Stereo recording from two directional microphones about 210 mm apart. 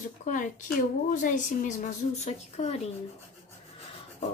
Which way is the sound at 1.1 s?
35° left (ahead or behind).